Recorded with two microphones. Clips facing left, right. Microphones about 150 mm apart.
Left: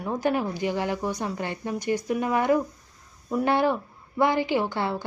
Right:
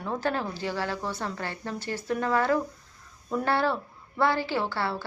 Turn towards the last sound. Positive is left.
turn(degrees=15)  # may be behind; listen again after turning